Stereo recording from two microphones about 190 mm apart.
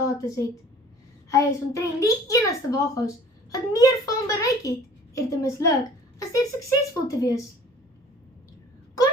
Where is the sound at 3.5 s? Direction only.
20° left (ahead or behind).